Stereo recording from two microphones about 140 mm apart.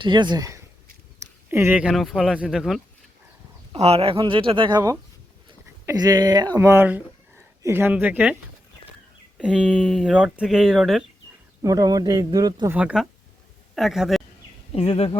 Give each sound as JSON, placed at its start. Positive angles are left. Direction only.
{"t": 0.0, "sound": "speech", "side_deg": -35}
{"t": 1.5, "sound": "speech", "side_deg": -15}
{"t": 1.9, "sound": "speech", "side_deg": 0}
{"t": 3.7, "sound": "speech", "side_deg": -45}
{"t": 6.0, "sound": "speech", "side_deg": -30}
{"t": 9.4, "sound": "speech", "side_deg": -5}
{"t": 11.6, "sound": "speech", "side_deg": -25}
{"t": 12.7, "sound": "speech", "side_deg": -5}
{"t": 14.7, "sound": "speech", "side_deg": 45}